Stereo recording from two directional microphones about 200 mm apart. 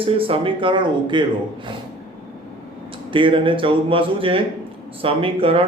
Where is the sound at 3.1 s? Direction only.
25° right (ahead or behind).